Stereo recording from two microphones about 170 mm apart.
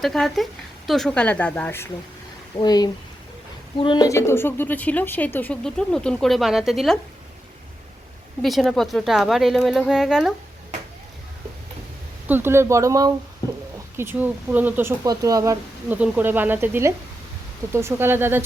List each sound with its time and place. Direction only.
0.0 s a woman's voice: centre (ahead or behind)
2.6 s a woman's voice: 25° left (ahead or behind); by 7.0 s centre (ahead or behind)
8.4 s a woman's voice: centre (ahead or behind)
12.3 s speech: 15° right (ahead or behind)